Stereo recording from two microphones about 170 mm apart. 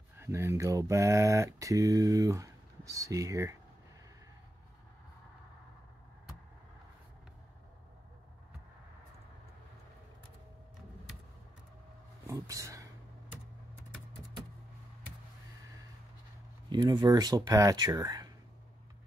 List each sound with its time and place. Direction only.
0.2 s speech: 15° right (ahead or behind)
12.3 s a sound: 20° right (ahead or behind)
16.6 s speech: 25° right (ahead or behind)